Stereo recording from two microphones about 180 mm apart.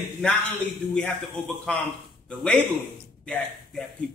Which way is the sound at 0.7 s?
5° left (ahead or behind).